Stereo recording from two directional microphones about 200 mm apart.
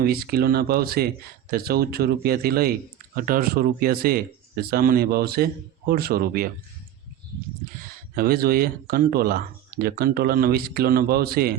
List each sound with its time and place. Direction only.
0.0 s speech: 50° right (ahead or behind)
8.1 s speech: 50° right (ahead or behind)